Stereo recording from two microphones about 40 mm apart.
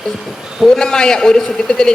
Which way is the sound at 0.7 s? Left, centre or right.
Centre.